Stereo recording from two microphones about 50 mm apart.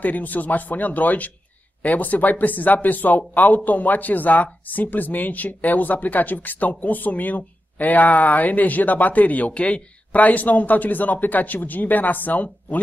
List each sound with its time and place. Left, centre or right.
0.0 s speech: left